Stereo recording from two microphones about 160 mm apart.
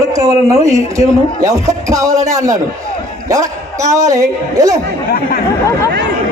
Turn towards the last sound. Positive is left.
turn(degrees=-20)  # may be behind; listen again after turning